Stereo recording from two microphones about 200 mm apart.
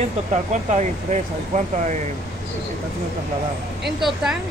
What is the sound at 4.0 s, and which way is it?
Speech, centre (ahead or behind).